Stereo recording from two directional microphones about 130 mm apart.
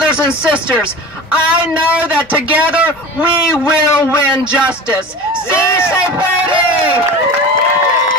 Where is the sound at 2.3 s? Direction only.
10° right (ahead or behind).